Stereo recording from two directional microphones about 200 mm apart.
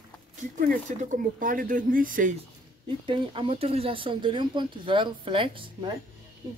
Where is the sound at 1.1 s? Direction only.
40° right (ahead or behind).